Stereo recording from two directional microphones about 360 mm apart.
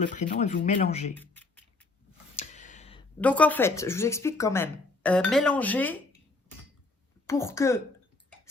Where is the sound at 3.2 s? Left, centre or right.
Centre.